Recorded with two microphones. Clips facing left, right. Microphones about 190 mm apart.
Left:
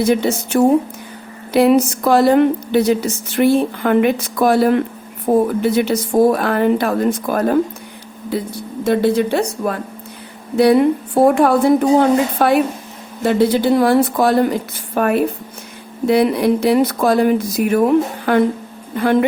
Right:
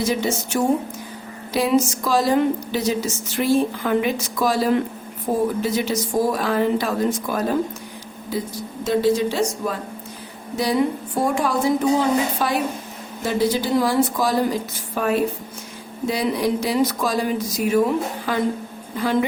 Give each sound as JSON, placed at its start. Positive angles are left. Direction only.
{"t": 0.0, "sound": "a woman's voice", "side_deg": 60}